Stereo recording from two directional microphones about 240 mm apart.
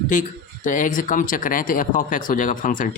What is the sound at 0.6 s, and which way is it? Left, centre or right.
Speech, left.